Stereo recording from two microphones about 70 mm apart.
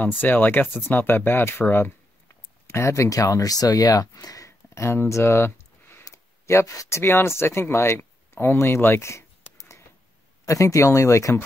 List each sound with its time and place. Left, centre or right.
0.2 s speech: left
2.7 s speech: left
4.5 s a sound: left
6.0 s speech: left